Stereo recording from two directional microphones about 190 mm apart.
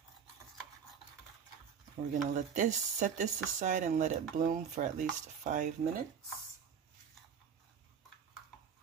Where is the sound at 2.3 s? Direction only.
40° right (ahead or behind).